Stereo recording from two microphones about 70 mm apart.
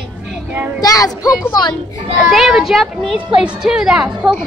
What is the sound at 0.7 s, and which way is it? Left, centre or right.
Speech, left.